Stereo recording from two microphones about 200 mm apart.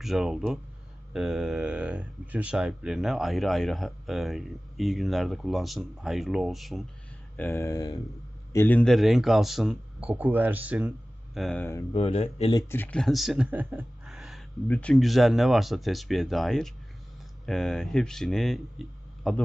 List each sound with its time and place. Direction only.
0.0 s speech: centre (ahead or behind)
7.3 s speech: 10° left (ahead or behind); by 10.9 s 5° right (ahead or behind)
11.3 s speech: 5° left (ahead or behind)
11.9 s speech: 30° left (ahead or behind)
12.6 s speech: 10° left (ahead or behind)